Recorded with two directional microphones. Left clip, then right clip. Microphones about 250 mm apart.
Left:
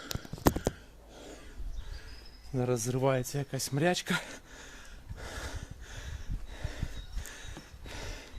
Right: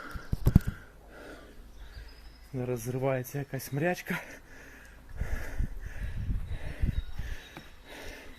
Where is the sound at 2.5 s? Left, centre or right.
Left.